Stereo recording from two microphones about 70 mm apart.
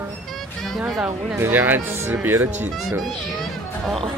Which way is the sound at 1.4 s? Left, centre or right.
Right.